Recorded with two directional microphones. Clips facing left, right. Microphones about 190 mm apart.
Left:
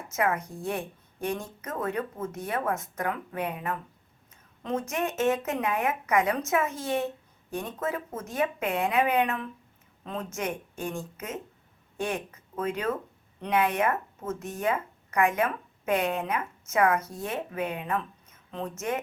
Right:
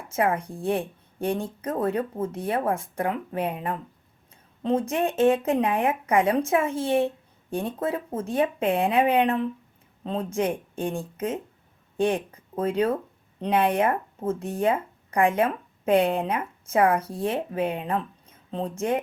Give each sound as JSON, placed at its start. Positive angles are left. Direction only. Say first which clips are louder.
{"t": 0.1, "sound": "a woman's voice", "louder": "right 3 dB", "side_deg": -30}